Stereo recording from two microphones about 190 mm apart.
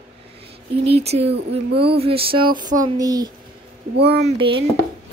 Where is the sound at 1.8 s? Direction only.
30° right (ahead or behind).